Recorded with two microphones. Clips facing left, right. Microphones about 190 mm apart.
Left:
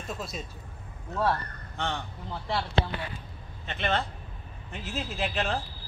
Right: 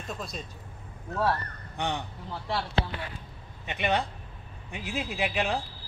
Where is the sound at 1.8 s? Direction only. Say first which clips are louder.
Right 1 dB; 15° right (ahead or behind).